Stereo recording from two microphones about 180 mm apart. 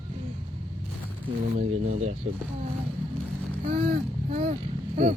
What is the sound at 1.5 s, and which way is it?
Speech, 40° right (ahead or behind).